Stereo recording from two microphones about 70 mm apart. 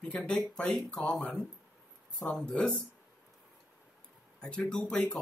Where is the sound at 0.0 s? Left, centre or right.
Centre.